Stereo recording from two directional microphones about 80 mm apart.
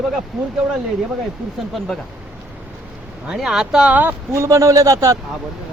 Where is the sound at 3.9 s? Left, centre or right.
Right.